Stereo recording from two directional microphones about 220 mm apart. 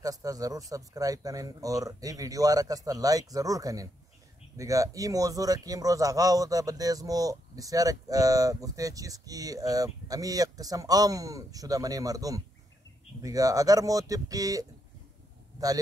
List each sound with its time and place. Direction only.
0.0 s a man's voice: 15° right (ahead or behind)